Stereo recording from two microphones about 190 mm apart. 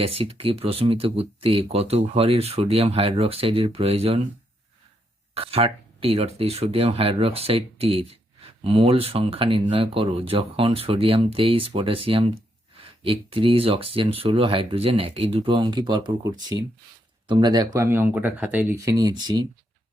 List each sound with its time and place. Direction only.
0.0 s speech: 30° right (ahead or behind)
5.3 s speech: 30° right (ahead or behind)